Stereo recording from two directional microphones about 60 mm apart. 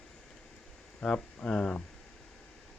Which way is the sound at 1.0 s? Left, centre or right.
Centre.